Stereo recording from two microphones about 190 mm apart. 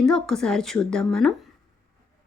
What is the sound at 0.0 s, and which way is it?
Speech, 5° left (ahead or behind).